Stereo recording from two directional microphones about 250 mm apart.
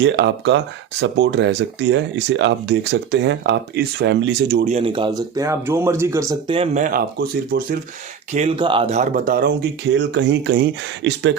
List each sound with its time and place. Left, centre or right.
0.0 s speech: right
4.6 s speech: right
8.3 s speech: right